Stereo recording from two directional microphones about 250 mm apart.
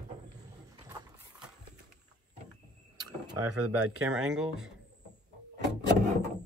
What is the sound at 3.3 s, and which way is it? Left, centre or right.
Speech, right.